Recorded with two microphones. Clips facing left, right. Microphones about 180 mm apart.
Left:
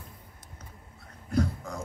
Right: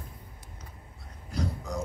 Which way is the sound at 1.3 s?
55° left (ahead or behind).